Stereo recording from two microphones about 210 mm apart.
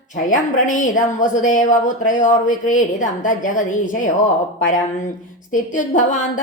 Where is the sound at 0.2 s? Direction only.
40° left (ahead or behind).